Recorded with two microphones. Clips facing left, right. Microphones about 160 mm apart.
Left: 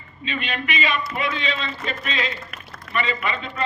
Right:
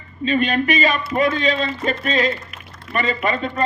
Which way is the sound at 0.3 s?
40° right (ahead or behind).